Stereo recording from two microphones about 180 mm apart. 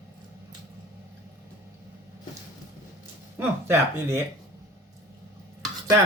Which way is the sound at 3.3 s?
15° right (ahead or behind).